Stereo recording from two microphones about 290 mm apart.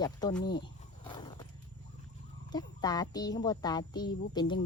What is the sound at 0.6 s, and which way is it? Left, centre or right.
Roaring cats, centre.